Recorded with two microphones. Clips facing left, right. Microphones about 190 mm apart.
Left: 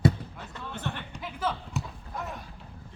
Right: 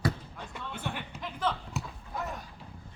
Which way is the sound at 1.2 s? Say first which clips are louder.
Left 1 dB; 5° left (ahead or behind).